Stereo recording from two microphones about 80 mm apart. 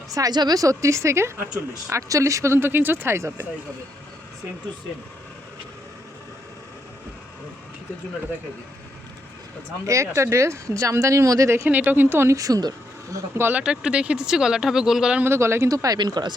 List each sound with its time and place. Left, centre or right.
0.1 s a woman's voice: right
9.8 s speech: right
11.7 s speech: right
13.4 s speech: centre
15.2 s speech: right
15.7 s a woman's voice: right
16.0 s speech: right